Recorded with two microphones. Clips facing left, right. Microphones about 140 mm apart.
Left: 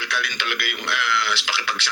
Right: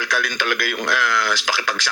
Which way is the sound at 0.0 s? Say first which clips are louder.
Right 5 dB; 45° right (ahead or behind).